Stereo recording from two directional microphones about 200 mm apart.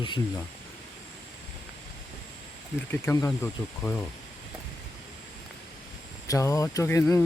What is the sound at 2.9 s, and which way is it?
Speech, 10° left (ahead or behind).